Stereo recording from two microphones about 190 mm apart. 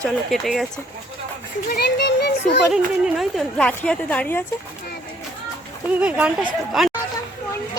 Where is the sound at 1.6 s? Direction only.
55° left (ahead or behind).